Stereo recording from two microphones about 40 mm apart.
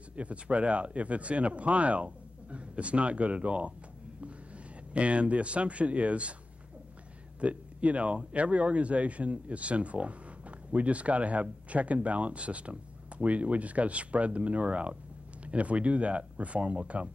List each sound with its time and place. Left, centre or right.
0.1 s speech: right
4.9 s speech: right
7.3 s speech: right